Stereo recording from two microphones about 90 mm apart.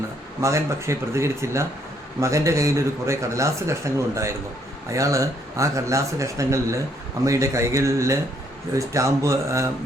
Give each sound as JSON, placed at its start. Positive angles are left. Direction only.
{"t": 0.4, "sound": "a man's voice", "side_deg": -35}